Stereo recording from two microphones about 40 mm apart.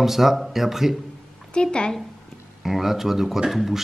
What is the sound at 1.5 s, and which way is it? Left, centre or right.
Speech, left.